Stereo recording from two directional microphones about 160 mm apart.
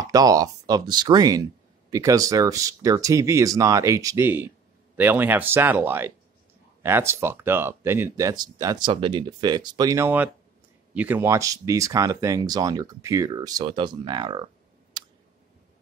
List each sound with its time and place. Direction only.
0.0 s speech: 20° right (ahead or behind)
15.0 s clicking: 25° right (ahead or behind)